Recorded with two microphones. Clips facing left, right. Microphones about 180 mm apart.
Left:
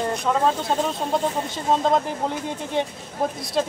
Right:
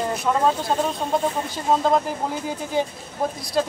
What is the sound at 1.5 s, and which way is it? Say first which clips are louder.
Speech: right 1 dB; centre (ahead or behind).